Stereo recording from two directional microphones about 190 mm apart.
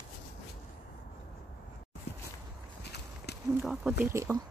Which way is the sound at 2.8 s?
60° left (ahead or behind).